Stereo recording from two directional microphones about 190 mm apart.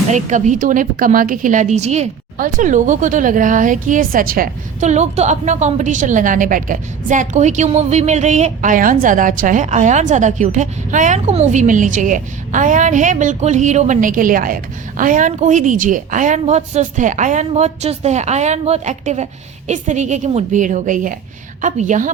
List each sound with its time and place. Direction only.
0.1 s a woman's voice: 40° right (ahead or behind)